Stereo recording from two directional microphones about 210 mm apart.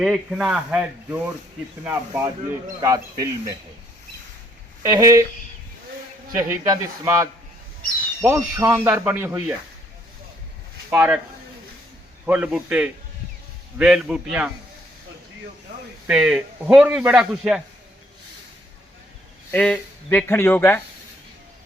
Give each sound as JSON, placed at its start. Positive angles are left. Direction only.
{"t": 0.0, "sound": "a man's voice", "side_deg": 0}
{"t": 4.8, "sound": "speech", "side_deg": -15}
{"t": 6.3, "sound": "speech", "side_deg": -15}
{"t": 10.9, "sound": "speech", "side_deg": -10}
{"t": 12.2, "sound": "a man's voice", "side_deg": -5}
{"t": 16.0, "sound": "a man's voice", "side_deg": -5}
{"t": 19.5, "sound": "speech", "side_deg": 5}